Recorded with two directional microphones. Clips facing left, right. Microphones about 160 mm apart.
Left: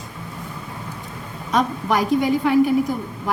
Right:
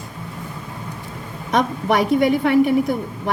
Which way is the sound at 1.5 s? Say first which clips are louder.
Right 2 dB; 70° right (ahead or behind).